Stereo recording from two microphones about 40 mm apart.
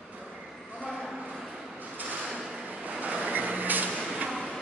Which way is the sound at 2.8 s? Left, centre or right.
Right.